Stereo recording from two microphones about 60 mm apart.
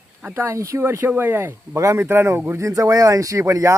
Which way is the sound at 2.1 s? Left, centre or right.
Right.